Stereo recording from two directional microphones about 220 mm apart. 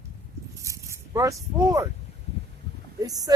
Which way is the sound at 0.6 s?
15° right (ahead or behind).